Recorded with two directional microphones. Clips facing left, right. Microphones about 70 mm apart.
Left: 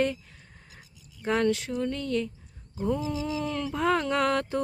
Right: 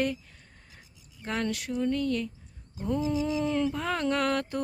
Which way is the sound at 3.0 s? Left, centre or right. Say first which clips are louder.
Right 2 dB; right.